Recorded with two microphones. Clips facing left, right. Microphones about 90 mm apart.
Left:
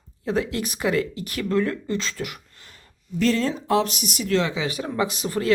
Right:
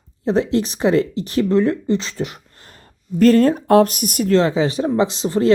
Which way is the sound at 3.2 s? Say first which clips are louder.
Right 9 dB; 50° right (ahead or behind).